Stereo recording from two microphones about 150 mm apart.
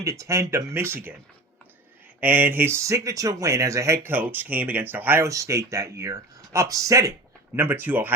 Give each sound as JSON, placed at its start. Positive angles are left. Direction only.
{"t": 0.0, "sound": "speech", "side_deg": -20}
{"t": 2.2, "sound": "speech", "side_deg": -15}